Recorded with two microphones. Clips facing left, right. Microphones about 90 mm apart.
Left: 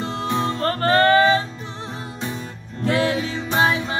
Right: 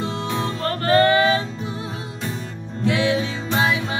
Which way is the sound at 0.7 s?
35° left (ahead or behind).